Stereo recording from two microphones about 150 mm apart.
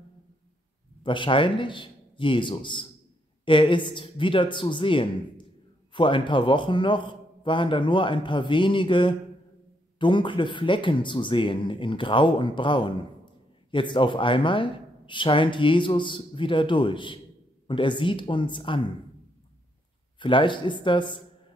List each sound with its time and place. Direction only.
1.0 s speech: 35° left (ahead or behind)
20.2 s speech: 35° left (ahead or behind)